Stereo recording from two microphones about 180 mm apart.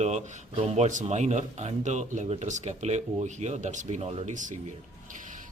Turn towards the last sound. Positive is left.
turn(degrees=-45)  # may be behind; listen again after turning